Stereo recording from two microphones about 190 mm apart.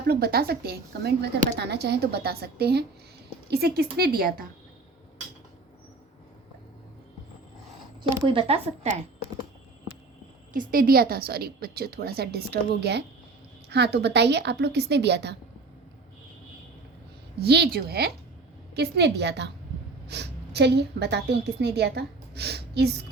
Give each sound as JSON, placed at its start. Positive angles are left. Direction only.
{"t": 0.1, "sound": "a woman's voice", "side_deg": -55}
{"t": 8.3, "sound": "speech", "side_deg": -30}
{"t": 10.5, "sound": "a woman's voice", "side_deg": -50}
{"t": 17.4, "sound": "a woman's voice", "side_deg": -60}